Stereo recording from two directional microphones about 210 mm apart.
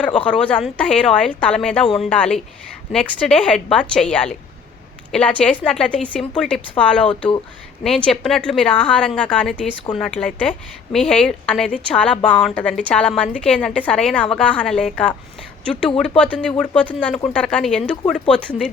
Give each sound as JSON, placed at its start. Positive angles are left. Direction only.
{"t": 0.0, "sound": "a woman's voice", "side_deg": 5}